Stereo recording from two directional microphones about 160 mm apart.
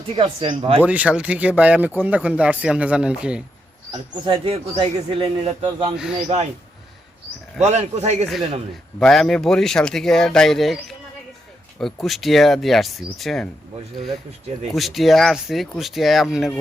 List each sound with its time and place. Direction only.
0.2 s speech: 35° right (ahead or behind)
0.9 s speech: 10° right (ahead or behind)
3.9 s speech: 35° right (ahead or behind)
7.6 s speech: 45° right (ahead or behind)
9.0 s speech: centre (ahead or behind)
14.7 s speech: centre (ahead or behind)